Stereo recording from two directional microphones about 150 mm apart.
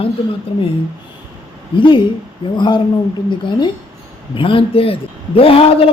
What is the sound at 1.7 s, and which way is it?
A man's voice, 35° left (ahead or behind).